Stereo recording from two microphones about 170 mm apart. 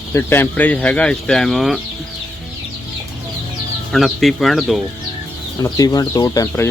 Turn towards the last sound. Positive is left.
turn(degrees=20)  # may be behind; listen again after turning